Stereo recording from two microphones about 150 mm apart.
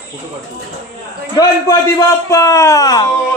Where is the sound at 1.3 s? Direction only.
25° left (ahead or behind).